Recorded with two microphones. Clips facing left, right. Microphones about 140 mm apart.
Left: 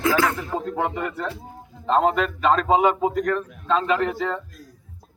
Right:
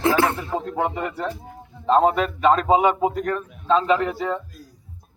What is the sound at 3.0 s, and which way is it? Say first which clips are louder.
Speech: left 1 dB; 30° right (ahead or behind).